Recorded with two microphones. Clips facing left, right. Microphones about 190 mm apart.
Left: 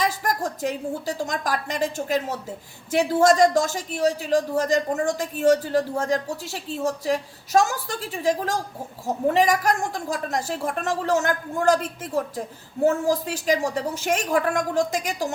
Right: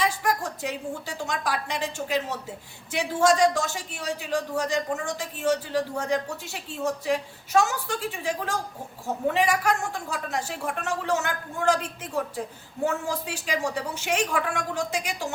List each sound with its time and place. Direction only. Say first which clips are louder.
0.0 s a woman's voice: left 1 dB; 45° left (ahead or behind)